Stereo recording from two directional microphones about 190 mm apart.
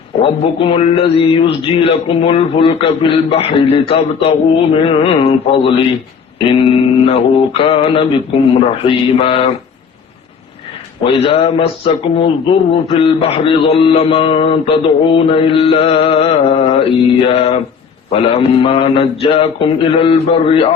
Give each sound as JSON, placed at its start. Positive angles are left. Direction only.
{"t": 0.2, "sound": "a man's voice", "side_deg": 30}
{"t": 11.0, "sound": "mantra", "side_deg": 30}
{"t": 12.1, "sound": "a man's voice", "side_deg": 30}
{"t": 15.1, "sound": "mantra", "side_deg": 30}
{"t": 18.1, "sound": "a man's voice", "side_deg": 30}